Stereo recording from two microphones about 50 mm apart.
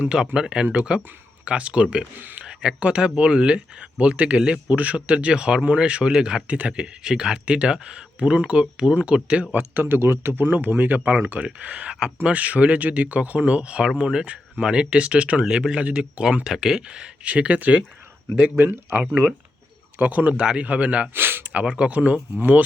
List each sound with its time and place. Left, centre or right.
0.3 s speech: centre
2.2 s a sound: right
2.5 s speech: centre
9.5 s speech: right
9.8 s speech: right
11.4 s speech: right
18.6 s speech: right
20.0 s speech: right
21.1 s a sound: right
21.5 s speech: right